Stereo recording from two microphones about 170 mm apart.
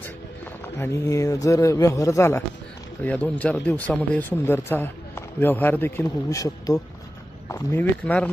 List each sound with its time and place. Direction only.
0.6 s a man's voice: 15° left (ahead or behind)